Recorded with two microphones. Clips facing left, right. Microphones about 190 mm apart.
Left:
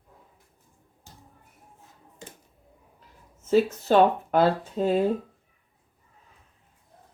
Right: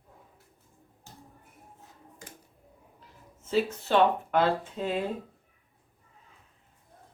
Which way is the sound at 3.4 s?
45° left (ahead or behind).